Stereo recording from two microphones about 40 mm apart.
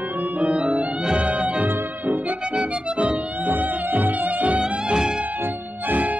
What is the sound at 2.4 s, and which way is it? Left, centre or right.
Music, right.